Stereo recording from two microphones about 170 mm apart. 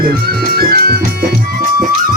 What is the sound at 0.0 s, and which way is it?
Music, 60° right (ahead or behind).